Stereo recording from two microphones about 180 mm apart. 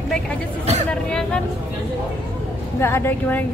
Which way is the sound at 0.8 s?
5° left (ahead or behind).